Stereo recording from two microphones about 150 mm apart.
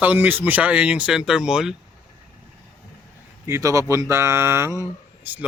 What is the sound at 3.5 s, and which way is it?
Speech, 20° right (ahead or behind).